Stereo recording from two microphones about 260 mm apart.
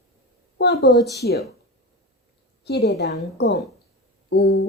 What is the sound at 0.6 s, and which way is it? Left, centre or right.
Speech, left.